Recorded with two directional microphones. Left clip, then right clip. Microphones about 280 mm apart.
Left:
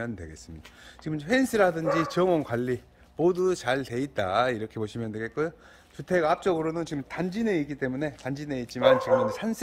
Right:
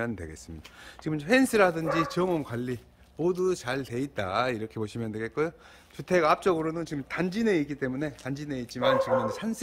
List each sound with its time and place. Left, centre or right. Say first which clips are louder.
0.0 s speech: right 2 dB; centre